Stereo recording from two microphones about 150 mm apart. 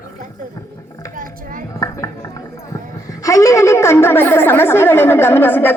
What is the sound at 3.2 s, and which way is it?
A woman's voice, 20° left (ahead or behind).